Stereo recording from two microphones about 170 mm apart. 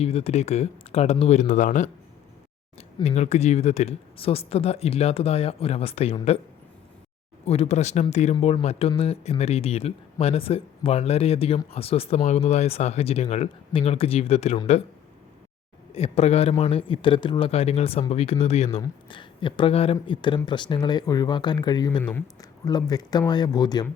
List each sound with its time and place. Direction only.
0.0 s speech: 35° left (ahead or behind)
2.7 s speech: 40° left (ahead or behind)
7.4 s speech: 35° left (ahead or behind)
15.9 s speech: 35° left (ahead or behind)